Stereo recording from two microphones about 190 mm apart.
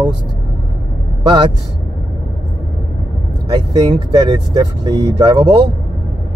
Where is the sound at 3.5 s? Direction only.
20° right (ahead or behind).